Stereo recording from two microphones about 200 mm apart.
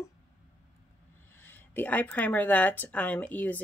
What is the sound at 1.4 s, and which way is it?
Speech, 10° left (ahead or behind).